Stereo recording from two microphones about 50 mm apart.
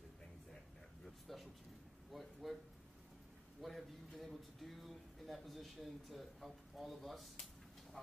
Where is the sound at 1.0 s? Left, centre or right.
Centre.